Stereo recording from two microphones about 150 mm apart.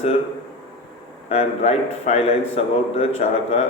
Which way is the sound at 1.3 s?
45° left (ahead or behind).